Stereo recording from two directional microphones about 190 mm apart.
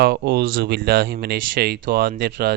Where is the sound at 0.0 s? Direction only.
60° right (ahead or behind).